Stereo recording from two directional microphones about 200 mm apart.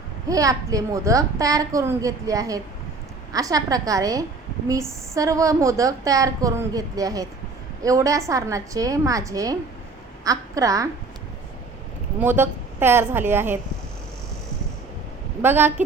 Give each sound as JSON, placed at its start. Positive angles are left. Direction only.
{"t": 0.3, "sound": "a woman's voice", "side_deg": -15}
{"t": 12.2, "sound": "a woman's voice", "side_deg": -10}
{"t": 15.4, "sound": "a woman's voice", "side_deg": -10}